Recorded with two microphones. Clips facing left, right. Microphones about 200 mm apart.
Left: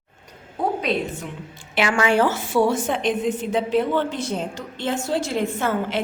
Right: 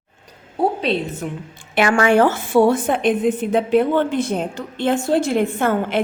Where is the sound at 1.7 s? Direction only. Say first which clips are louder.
Right 4 dB; 50° right (ahead or behind).